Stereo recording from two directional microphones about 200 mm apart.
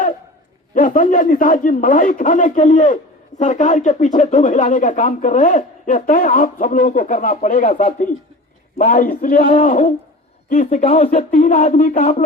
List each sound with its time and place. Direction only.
0.7 s speech: 40° left (ahead or behind)